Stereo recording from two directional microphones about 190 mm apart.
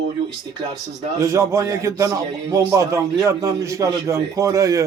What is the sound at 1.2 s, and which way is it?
A man's voice, 15° right (ahead or behind).